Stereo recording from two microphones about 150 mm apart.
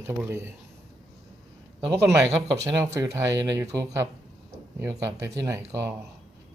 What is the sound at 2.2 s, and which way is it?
Speech, 20° right (ahead or behind).